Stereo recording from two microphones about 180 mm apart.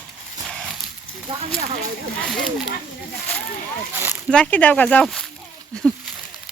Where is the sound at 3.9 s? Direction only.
10° right (ahead or behind).